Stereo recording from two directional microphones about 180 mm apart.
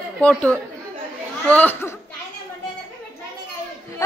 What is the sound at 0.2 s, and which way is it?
A child's voice, 5° left (ahead or behind).